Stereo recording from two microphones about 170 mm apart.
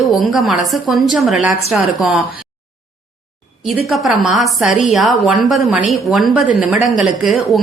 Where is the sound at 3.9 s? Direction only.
Centre (ahead or behind).